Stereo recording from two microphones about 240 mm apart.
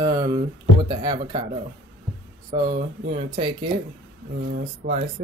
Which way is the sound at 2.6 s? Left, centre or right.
Right.